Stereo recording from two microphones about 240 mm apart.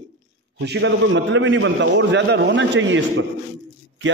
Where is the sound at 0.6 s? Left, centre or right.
Right.